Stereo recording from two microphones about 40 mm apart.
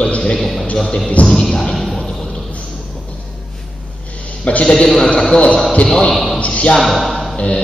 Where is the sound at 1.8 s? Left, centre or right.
Centre.